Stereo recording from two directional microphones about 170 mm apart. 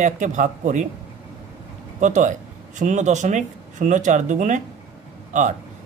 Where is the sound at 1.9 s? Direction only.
45° right (ahead or behind).